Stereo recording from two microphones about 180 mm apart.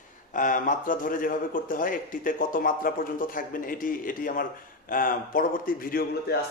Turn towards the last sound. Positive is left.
turn(degrees=55)  # may be behind; listen again after turning